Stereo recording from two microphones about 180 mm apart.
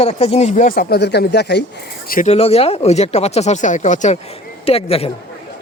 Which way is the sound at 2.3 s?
35° left (ahead or behind).